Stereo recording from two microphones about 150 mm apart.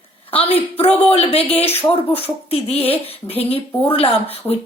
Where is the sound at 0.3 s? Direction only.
40° left (ahead or behind).